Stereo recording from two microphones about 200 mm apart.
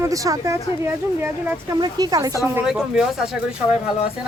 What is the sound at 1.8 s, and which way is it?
Speech, 20° right (ahead or behind).